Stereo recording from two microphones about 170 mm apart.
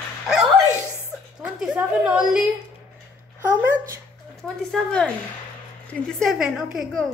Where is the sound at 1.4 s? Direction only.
5° right (ahead or behind).